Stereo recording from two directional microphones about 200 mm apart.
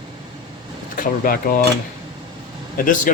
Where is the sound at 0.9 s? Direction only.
45° left (ahead or behind).